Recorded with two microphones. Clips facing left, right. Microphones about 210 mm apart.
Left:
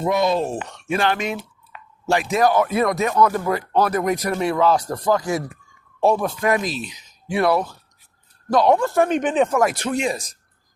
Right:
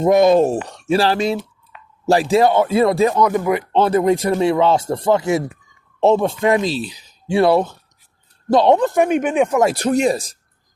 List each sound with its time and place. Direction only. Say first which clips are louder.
0.0 s speech: right 8 dB; 50° right (ahead or behind)
0.5 s speech: right 6 dB; 35° right (ahead or behind)
3.2 s speech: right 2 dB; 15° right (ahead or behind)
9.6 s speech: right 5 dB; 30° right (ahead or behind)